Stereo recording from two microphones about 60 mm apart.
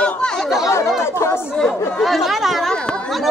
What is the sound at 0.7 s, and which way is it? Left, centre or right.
Chatter, left.